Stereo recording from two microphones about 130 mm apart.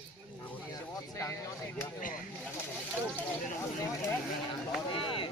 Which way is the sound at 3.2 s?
20° left (ahead or behind).